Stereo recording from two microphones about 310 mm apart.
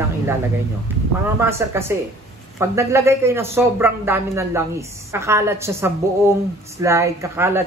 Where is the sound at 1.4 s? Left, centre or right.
Centre.